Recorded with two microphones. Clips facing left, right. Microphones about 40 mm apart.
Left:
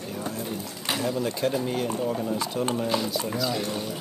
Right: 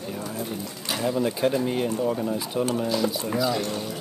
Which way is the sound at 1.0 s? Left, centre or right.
Centre.